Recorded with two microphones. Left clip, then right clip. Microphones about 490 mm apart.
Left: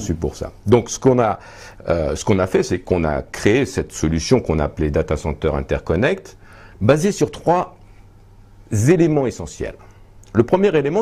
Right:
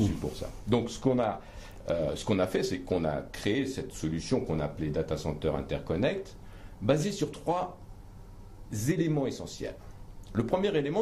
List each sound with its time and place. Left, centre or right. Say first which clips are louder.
0.4 s speech: left 14 dB; left
8.6 s speech: left 15 dB; left